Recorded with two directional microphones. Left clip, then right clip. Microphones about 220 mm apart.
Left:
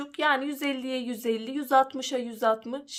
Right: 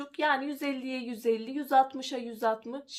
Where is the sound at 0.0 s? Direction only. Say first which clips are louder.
Left 3 dB; 25° left (ahead or behind).